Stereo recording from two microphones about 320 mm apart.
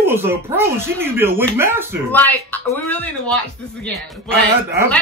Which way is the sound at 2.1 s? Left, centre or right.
Centre.